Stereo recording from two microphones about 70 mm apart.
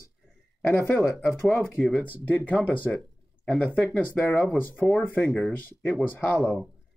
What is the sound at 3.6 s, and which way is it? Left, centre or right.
Speech, centre.